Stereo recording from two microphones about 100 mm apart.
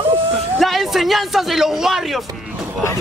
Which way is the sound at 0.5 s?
Centre (ahead or behind).